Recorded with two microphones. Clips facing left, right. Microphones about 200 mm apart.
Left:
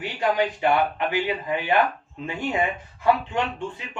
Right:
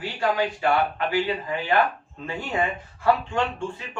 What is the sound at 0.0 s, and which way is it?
A man's voice, 20° left (ahead or behind).